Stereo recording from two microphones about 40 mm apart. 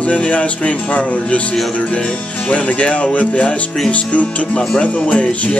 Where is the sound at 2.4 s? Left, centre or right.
Left.